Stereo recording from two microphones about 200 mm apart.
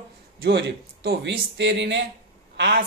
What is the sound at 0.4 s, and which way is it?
A woman's voice, 55° right (ahead or behind).